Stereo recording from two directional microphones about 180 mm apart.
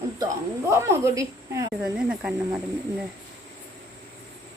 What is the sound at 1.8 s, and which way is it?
Speech, 5° right (ahead or behind).